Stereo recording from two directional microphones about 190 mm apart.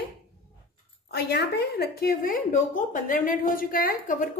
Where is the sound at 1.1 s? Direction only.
60° left (ahead or behind).